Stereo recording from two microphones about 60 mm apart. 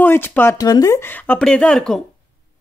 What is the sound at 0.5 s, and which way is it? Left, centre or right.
Speech, left.